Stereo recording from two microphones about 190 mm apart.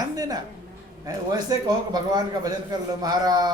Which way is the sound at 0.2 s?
20° right (ahead or behind).